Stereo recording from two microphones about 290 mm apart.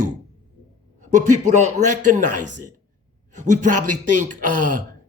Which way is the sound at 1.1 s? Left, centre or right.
Right.